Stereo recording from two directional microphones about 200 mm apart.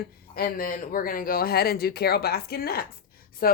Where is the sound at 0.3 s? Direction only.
50° left (ahead or behind).